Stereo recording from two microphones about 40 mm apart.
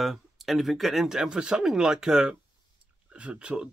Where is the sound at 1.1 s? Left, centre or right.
Centre.